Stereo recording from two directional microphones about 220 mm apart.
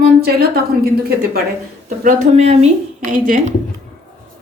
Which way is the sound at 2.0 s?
35° right (ahead or behind).